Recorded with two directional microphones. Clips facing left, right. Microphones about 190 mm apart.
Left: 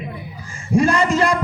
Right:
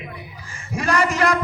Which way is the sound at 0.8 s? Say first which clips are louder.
Left 4 dB; 25° left (ahead or behind).